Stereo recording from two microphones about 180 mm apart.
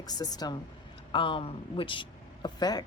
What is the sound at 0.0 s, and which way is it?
Speech, 20° left (ahead or behind).